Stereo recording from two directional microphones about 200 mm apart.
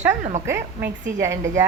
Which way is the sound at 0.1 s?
35° right (ahead or behind).